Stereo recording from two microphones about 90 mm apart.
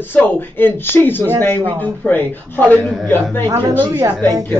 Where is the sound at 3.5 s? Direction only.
40° right (ahead or behind).